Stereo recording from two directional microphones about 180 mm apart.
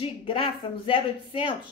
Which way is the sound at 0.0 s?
30° left (ahead or behind).